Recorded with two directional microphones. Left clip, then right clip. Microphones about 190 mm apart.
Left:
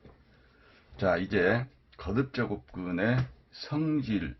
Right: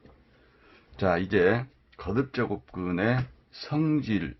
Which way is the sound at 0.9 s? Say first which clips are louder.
Right 3 dB; 35° right (ahead or behind).